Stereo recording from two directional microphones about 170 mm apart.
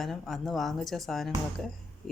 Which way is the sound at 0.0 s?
Centre (ahead or behind).